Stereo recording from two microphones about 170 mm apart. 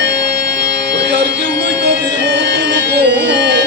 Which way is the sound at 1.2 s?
85° right.